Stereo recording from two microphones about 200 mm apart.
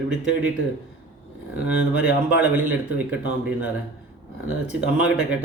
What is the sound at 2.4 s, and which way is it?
Speech, 10° right (ahead or behind).